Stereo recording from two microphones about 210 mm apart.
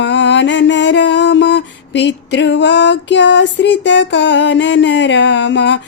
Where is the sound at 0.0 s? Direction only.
55° left (ahead or behind).